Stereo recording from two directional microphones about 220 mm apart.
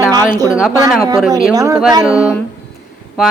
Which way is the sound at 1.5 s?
15° right (ahead or behind).